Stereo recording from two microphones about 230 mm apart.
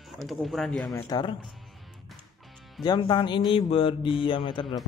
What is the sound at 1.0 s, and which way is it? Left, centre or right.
Speech, centre.